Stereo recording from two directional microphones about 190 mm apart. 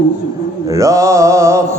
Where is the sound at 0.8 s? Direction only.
15° right (ahead or behind).